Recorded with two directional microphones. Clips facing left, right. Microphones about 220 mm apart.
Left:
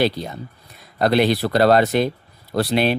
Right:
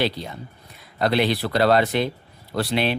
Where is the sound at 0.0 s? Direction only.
45° left (ahead or behind).